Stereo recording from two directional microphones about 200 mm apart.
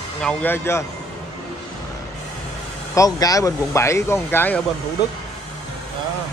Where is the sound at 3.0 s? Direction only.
15° left (ahead or behind).